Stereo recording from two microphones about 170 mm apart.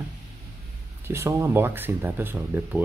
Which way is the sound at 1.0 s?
15° right (ahead or behind).